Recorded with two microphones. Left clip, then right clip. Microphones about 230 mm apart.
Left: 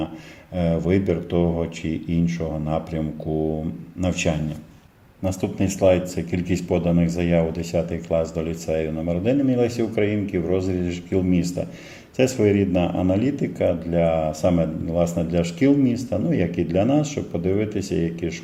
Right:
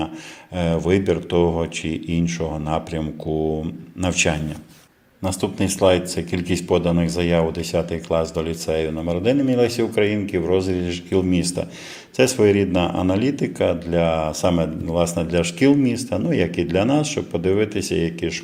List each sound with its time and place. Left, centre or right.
0.5 s speech: centre
4.0 s speech: centre